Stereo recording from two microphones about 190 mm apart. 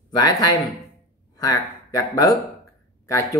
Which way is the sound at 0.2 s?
20° left (ahead or behind).